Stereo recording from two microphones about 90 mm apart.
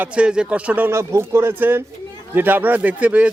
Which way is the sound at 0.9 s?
30° right (ahead or behind).